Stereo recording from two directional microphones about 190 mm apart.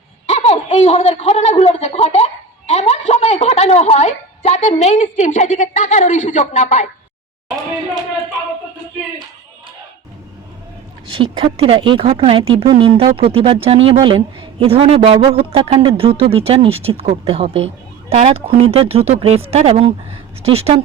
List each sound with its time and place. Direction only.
0.3 s a man's voice: 35° left (ahead or behind)
11.1 s speech: 25° right (ahead or behind)